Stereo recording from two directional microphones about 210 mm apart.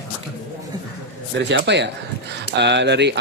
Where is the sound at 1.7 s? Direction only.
55° right (ahead or behind).